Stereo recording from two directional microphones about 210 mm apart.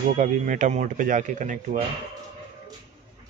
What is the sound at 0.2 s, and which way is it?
Speech, 35° right (ahead or behind).